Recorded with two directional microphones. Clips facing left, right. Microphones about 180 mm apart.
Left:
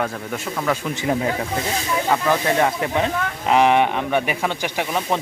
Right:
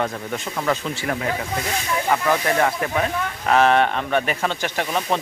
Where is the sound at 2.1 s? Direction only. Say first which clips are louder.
Left 1 dB; 5° left (ahead or behind).